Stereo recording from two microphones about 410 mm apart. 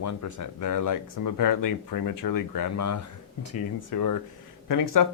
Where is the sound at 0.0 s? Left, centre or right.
Left.